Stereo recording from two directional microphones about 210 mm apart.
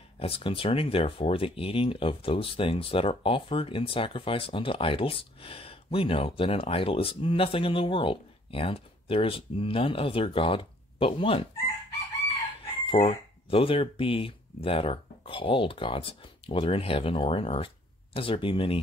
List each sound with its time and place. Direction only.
0.2 s speech: 25° left (ahead or behind)
12.9 s speech: 30° left (ahead or behind)